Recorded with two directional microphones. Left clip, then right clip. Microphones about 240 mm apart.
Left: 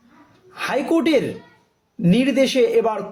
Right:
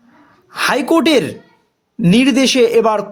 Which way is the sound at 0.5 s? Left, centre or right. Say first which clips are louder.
Right 7 dB; right.